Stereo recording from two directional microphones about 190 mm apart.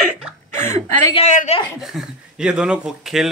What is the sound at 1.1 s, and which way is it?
Speech, 40° left (ahead or behind).